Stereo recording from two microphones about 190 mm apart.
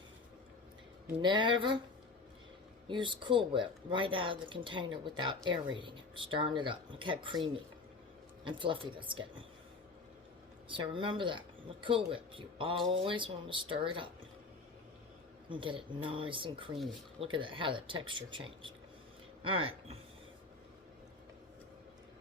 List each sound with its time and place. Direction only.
1.2 s speech: 25° right (ahead or behind)
2.9 s speech: 25° right (ahead or behind)
8.4 s speech: 25° right (ahead or behind)
10.7 s speech: 25° right (ahead or behind)
15.4 s speech: 25° right (ahead or behind)